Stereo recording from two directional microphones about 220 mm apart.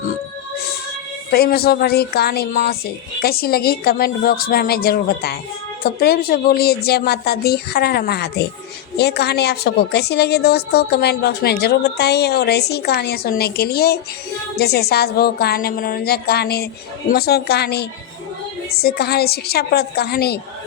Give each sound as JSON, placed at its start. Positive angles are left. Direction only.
{"t": 1.3, "sound": "a woman's voice", "side_deg": 45}